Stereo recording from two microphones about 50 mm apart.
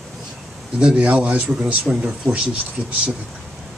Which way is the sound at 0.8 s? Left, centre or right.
Centre.